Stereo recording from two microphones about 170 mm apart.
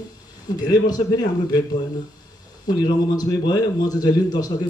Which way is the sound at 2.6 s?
20° left (ahead or behind).